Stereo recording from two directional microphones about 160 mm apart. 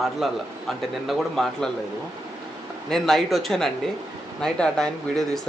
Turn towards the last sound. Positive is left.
turn(degrees=5)  # may be behind; listen again after turning